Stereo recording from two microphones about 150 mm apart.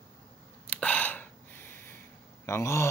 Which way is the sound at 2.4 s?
20° left (ahead or behind).